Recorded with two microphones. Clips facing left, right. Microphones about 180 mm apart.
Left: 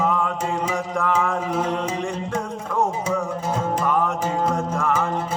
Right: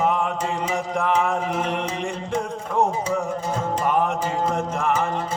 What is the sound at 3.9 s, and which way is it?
Music, 25° right (ahead or behind).